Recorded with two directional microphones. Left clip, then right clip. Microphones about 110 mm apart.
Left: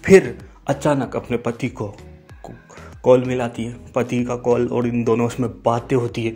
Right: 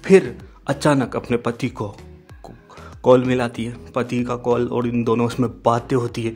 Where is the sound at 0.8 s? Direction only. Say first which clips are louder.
Right 3 dB; 30° right (ahead or behind).